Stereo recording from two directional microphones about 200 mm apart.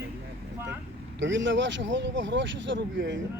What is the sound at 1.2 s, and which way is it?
Speech, 65° right (ahead or behind).